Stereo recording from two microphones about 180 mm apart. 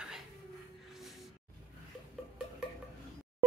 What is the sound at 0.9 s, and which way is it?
Music, centre (ahead or behind).